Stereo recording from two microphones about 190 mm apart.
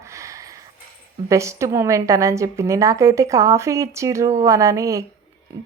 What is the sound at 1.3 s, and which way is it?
A woman's voice, 15° right (ahead or behind).